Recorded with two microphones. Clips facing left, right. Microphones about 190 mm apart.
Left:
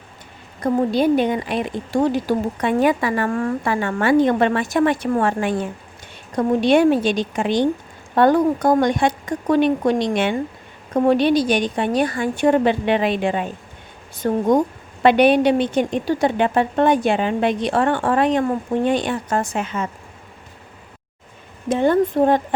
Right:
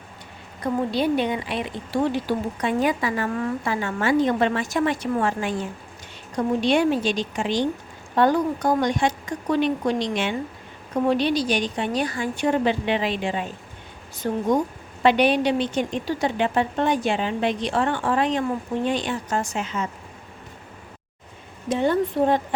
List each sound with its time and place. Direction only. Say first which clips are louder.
0.6 s a woman's voice: left 5 dB; 45° left (ahead or behind)
21.7 s speech: left 5 dB; 50° left (ahead or behind)